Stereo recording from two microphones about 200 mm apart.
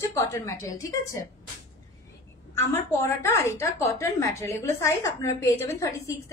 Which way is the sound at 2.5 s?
10° left (ahead or behind).